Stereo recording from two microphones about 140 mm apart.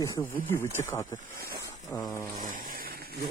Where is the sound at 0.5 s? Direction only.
15° left (ahead or behind).